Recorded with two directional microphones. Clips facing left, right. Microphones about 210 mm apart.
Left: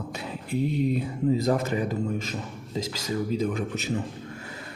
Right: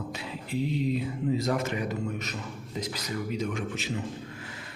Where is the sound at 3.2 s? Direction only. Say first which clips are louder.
Left 3 dB; 35° left (ahead or behind).